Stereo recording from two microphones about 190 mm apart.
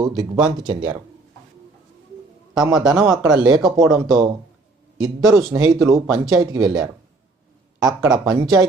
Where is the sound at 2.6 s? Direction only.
20° right (ahead or behind).